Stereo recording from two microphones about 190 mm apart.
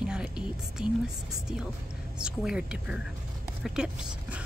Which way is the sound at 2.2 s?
5° right (ahead or behind).